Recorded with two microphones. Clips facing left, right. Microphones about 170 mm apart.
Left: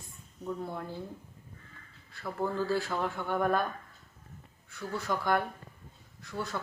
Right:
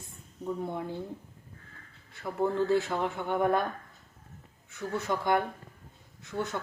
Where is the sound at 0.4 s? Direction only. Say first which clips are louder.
Right 3 dB; 20° right (ahead or behind).